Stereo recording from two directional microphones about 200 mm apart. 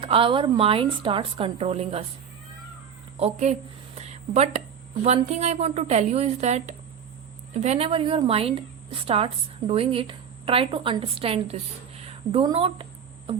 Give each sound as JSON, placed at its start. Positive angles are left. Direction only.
{"t": 0.0, "sound": "a woman's voice", "side_deg": -25}
{"t": 3.2, "sound": "a woman's voice", "side_deg": -30}
{"t": 12.0, "sound": "a sound", "side_deg": -25}